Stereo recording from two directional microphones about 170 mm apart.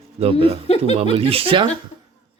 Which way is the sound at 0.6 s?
35° left (ahead or behind).